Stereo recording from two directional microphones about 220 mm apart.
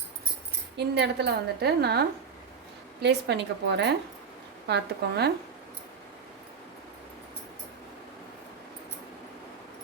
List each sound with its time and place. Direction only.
0.9 s a woman's voice: 50° right (ahead or behind)